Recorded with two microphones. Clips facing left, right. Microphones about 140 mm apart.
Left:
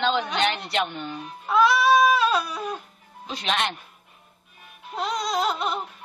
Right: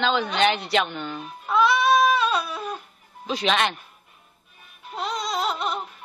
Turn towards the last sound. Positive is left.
turn(degrees=0)  # may be behind; listen again after turning